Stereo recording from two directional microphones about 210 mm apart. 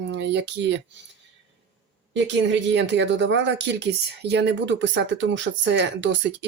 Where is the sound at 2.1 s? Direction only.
60° right (ahead or behind).